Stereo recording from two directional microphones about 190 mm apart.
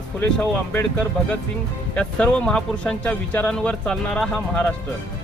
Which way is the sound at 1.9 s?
5° left (ahead or behind).